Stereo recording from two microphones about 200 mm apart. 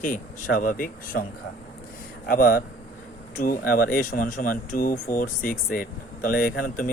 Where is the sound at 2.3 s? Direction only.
45° left (ahead or behind).